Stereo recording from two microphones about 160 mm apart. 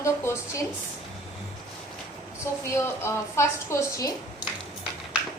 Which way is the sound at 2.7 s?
15° left (ahead or behind).